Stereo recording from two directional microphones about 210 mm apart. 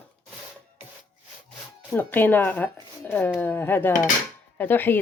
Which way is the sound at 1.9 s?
10° left (ahead or behind).